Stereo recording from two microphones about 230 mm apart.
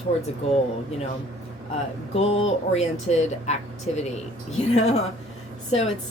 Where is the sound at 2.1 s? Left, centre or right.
Left.